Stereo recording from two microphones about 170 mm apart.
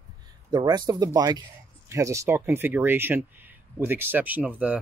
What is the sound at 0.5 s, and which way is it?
Speech, 25° right (ahead or behind).